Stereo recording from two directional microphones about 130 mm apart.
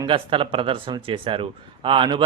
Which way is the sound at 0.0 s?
40° right (ahead or behind).